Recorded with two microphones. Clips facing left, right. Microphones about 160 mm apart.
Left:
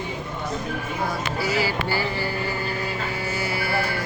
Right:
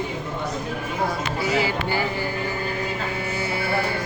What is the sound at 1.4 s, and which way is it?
Music, 25° right (ahead or behind).